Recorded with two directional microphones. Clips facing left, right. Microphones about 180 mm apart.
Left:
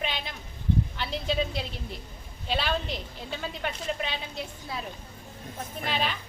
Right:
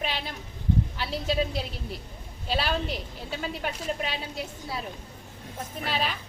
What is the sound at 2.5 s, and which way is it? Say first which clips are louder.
A woman's voice: right 1 dB; 5° right (ahead or behind).